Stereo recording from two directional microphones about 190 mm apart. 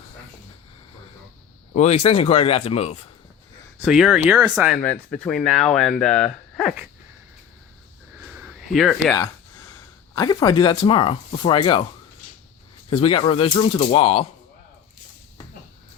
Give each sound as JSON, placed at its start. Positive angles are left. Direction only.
{"t": 1.7, "sound": "speech", "side_deg": 35}
{"t": 3.8, "sound": "speech", "side_deg": -5}
{"t": 4.8, "sound": "speech", "side_deg": 5}
{"t": 8.2, "sound": "a sound", "side_deg": -5}
{"t": 10.2, "sound": "speech", "side_deg": 25}
{"t": 12.9, "sound": "speech", "side_deg": 30}